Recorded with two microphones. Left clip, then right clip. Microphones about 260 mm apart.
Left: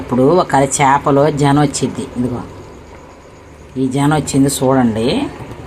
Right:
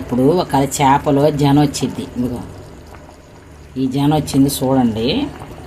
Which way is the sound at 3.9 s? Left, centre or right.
Centre.